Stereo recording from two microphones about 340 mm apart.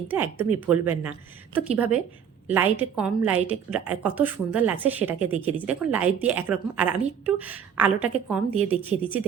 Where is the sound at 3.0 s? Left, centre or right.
Centre.